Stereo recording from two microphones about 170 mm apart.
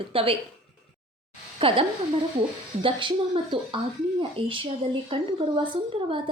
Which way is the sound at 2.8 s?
30° right (ahead or behind).